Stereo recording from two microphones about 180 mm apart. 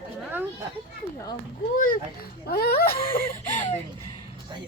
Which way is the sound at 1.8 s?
55° left (ahead or behind).